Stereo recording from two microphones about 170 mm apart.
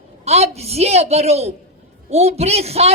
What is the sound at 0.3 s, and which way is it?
A woman's voice, 40° right (ahead or behind).